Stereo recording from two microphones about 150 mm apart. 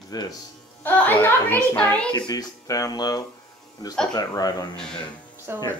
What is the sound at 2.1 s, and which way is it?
Speech, 25° left (ahead or behind).